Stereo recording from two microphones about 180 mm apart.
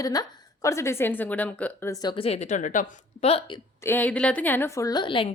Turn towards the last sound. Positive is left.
turn(degrees=30)  # may be behind; listen again after turning